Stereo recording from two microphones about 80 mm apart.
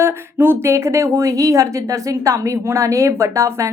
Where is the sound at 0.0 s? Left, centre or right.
Right.